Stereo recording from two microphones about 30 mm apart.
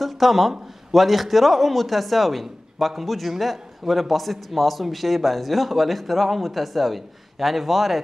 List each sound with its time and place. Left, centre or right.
0.0 s a man's voice: centre